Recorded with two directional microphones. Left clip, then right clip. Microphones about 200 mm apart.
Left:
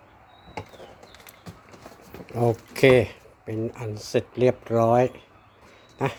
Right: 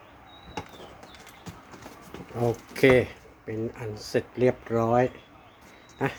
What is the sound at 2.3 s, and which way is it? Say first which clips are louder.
Speech: left 4 dB; 35° left (ahead or behind).